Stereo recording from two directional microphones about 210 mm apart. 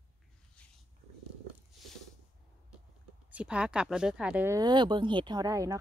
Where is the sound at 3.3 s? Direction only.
5° right (ahead or behind).